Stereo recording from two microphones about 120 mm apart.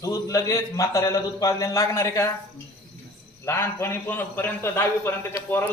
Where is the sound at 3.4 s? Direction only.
20° left (ahead or behind).